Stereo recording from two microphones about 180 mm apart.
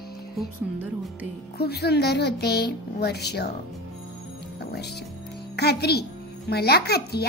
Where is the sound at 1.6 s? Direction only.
65° left (ahead or behind).